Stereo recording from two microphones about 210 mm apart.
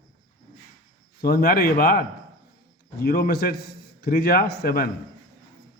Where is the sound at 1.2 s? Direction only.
45° left (ahead or behind).